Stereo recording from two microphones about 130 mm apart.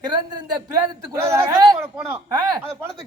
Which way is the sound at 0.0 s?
35° right (ahead or behind).